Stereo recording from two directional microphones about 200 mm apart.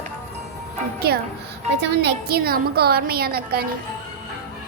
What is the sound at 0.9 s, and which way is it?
A woman's voice, 50° right (ahead or behind).